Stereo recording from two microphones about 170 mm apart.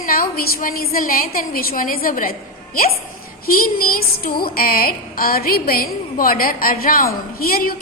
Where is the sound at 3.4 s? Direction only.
60° left (ahead or behind).